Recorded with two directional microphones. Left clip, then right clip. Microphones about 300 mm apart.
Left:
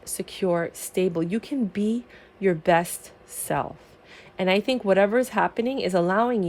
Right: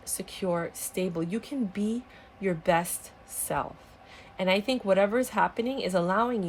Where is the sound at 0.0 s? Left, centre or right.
Left.